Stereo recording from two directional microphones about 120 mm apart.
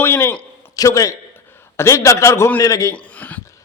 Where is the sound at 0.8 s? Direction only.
30° left (ahead or behind).